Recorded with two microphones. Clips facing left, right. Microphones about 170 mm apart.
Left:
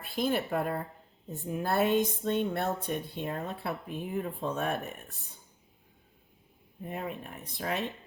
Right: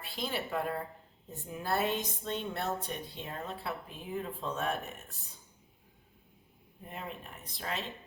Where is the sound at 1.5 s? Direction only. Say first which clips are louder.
Left 5 dB; 55° left (ahead or behind).